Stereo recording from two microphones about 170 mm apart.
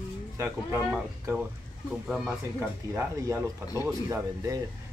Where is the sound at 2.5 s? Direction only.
15° right (ahead or behind).